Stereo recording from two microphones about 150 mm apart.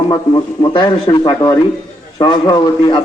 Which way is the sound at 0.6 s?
30° left (ahead or behind).